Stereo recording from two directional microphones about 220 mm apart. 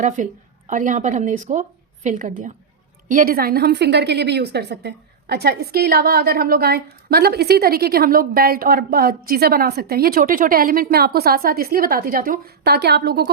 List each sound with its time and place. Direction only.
0.2 s a woman's voice: 35° right (ahead or behind)